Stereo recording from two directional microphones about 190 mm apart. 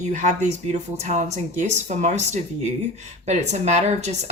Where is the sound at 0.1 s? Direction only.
40° right (ahead or behind).